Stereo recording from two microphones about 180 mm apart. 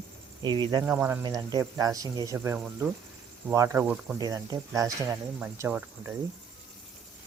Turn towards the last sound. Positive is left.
turn(degrees=-15)  # may be behind; listen again after turning